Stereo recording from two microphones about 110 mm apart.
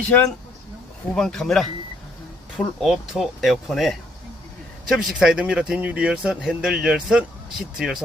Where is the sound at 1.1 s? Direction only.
5° left (ahead or behind).